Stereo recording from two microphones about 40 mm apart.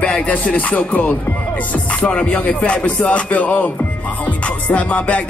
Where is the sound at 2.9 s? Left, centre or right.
Left.